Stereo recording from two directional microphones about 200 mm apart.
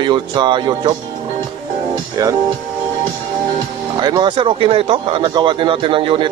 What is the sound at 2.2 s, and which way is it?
Speech, 15° right (ahead or behind).